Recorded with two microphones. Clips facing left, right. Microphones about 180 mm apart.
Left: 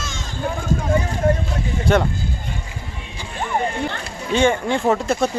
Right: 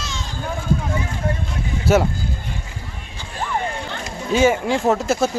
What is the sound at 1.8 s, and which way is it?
Speech, 5° right (ahead or behind).